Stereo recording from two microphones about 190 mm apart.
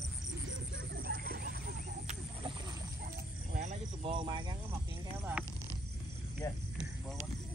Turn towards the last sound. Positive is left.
turn(degrees=15)  # may be behind; listen again after turning